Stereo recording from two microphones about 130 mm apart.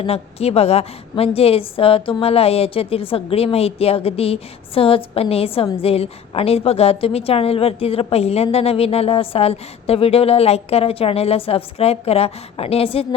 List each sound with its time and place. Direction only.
0.0 s a woman's voice: 50° left (ahead or behind)